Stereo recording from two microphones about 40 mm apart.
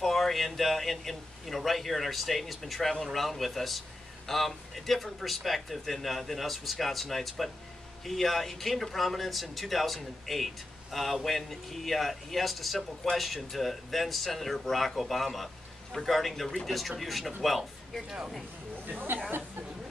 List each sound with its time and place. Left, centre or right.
0.0 s speech: centre
18.9 s speech: right